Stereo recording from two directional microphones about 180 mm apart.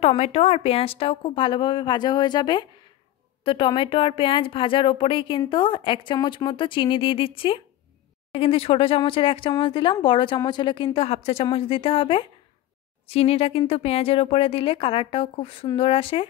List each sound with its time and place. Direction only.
0.0 s a woman's voice: 35° left (ahead or behind)